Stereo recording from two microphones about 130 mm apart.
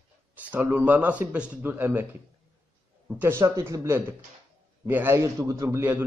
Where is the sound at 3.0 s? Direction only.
15° right (ahead or behind).